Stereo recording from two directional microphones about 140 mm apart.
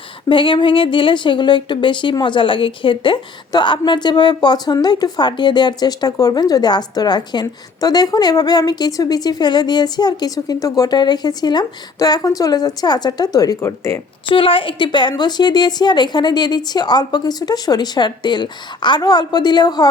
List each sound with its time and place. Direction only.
0.3 s a woman's voice: 35° left (ahead or behind); by 14.0 s 20° left (ahead or behind)
14.3 s speech: 40° left (ahead or behind)